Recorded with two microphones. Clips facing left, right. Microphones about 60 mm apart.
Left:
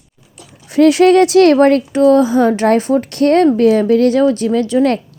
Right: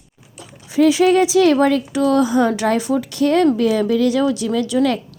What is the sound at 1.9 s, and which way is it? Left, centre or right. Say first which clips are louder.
Speech: left 6 dB; left.